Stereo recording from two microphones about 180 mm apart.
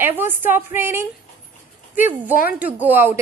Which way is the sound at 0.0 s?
10° right (ahead or behind).